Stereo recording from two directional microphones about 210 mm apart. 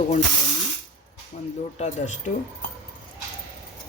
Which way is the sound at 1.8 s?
35° left (ahead or behind).